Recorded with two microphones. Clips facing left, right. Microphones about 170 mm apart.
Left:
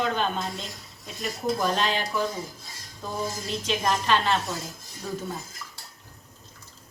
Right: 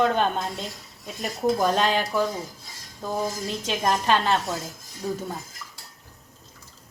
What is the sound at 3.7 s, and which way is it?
Speech, 45° right (ahead or behind).